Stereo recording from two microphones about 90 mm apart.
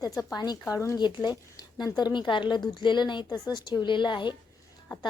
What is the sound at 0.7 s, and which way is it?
Speech, 35° left (ahead or behind).